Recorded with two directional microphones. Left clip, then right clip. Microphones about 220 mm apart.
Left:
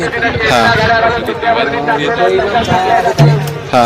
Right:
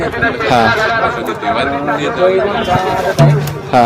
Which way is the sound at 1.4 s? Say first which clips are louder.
Left 3 dB; 50° right (ahead or behind).